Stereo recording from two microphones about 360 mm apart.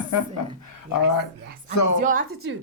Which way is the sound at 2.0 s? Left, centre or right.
Right.